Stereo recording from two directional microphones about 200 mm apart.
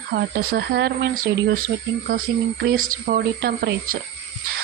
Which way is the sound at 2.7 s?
45° right (ahead or behind).